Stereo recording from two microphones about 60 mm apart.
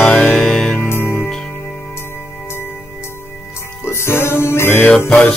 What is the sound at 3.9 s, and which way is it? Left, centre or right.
Music, left.